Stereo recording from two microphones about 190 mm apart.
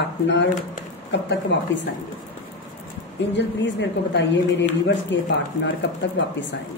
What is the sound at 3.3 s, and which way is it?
Speech, 70° left (ahead or behind).